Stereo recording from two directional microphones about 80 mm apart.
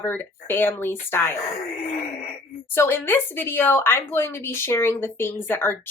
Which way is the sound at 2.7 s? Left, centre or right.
Left.